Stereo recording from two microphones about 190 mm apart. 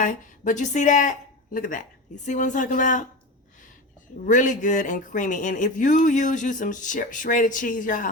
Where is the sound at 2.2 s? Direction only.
40° left (ahead or behind).